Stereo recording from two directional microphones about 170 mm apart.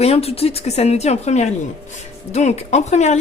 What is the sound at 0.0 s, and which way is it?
Speech, 35° left (ahead or behind).